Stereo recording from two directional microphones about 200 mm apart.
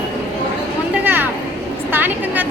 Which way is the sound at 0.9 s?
10° right (ahead or behind).